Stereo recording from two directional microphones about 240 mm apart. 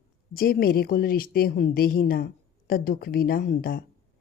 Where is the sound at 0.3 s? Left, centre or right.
Left.